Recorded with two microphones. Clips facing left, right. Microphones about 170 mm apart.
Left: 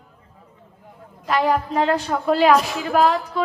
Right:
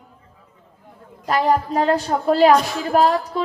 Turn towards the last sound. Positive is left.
turn(degrees=-40)  # may be behind; listen again after turning